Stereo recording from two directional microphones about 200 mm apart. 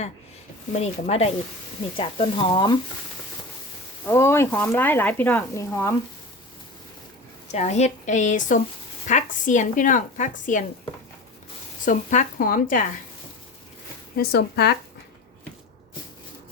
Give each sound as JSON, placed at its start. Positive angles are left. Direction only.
{"t": 0.7, "sound": "a woman's voice", "side_deg": 35}
{"t": 4.0, "sound": "speech", "side_deg": 15}
{"t": 7.4, "sound": "a woman's voice", "side_deg": 35}
{"t": 11.9, "sound": "speech", "side_deg": 40}
{"t": 14.2, "sound": "speech", "side_deg": 55}